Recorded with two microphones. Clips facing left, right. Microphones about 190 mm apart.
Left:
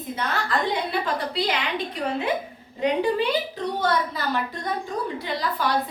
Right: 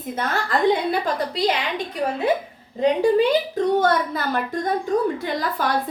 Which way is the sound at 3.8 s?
50° right (ahead or behind).